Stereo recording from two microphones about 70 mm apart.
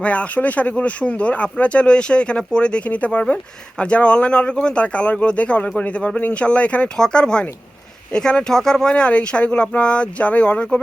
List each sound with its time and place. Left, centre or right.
0.0 s speech: centre